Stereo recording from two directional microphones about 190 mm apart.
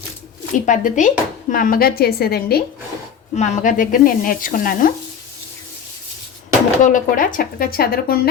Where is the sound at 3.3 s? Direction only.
35° left (ahead or behind).